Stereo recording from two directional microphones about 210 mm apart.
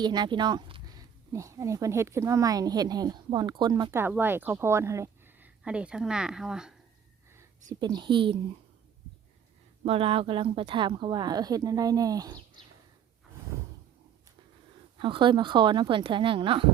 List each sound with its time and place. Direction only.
0.0 s speech: 20° right (ahead or behind); by 6.7 s 5° right (ahead or behind)
7.7 s speech: 20° right (ahead or behind)
9.8 s speech: 25° right (ahead or behind)
14.9 s speech: 25° right (ahead or behind)